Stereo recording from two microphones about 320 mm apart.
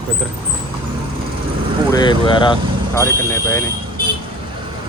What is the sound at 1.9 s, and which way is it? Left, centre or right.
Speech, centre.